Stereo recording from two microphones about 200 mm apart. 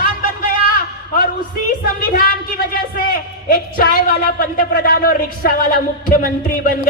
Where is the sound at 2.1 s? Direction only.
45° left (ahead or behind).